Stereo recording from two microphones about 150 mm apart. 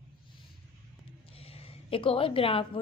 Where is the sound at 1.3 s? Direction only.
40° left (ahead or behind).